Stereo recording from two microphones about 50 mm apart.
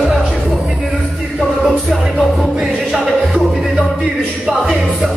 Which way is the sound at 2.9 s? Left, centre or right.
Centre.